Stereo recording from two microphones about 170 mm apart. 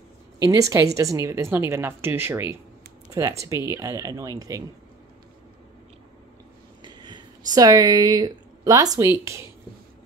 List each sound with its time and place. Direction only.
0.4 s a woman's voice: 20° right (ahead or behind)
6.8 s speech: 25° right (ahead or behind)